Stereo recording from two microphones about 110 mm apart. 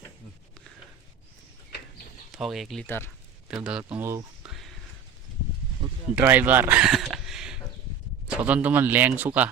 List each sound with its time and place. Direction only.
2.3 s speech: centre (ahead or behind)
2.8 s speech: 20° left (ahead or behind)
3.5 s speech: 10° right (ahead or behind)
4.4 s a sound: centre (ahead or behind)
6.2 s speech: 15° right (ahead or behind)